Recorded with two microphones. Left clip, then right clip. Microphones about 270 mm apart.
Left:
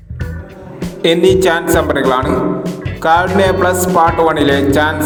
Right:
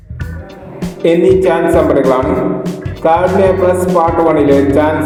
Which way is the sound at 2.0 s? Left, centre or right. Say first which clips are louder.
Right 2 dB; centre.